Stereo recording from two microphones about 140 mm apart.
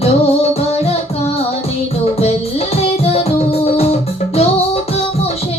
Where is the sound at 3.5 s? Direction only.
45° left (ahead or behind).